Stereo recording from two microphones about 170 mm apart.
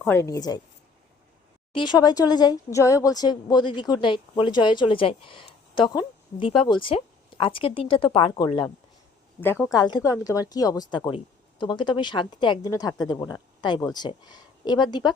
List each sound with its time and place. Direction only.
0.1 s speech: 20° left (ahead or behind)
1.7 s speech: 25° left (ahead or behind)
9.4 s speech: 15° left (ahead or behind)
9.7 s speech: 25° left (ahead or behind)